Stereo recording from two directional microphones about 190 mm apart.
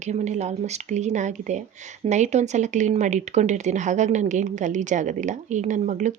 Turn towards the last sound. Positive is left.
turn(degrees=-40)  # may be behind; listen again after turning